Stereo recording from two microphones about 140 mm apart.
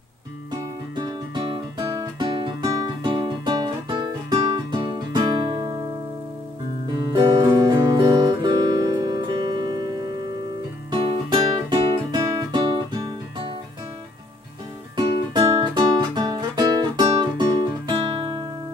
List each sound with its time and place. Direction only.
0.5 s music: 35° right (ahead or behind)
6.9 s guitar: 30° right (ahead or behind)
10.9 s music: 30° right (ahead or behind)
15.0 s music: 35° right (ahead or behind)